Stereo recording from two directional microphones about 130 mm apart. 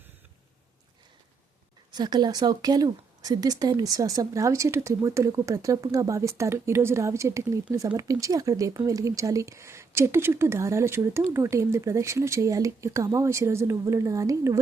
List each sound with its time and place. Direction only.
1.9 s speech: 30° right (ahead or behind)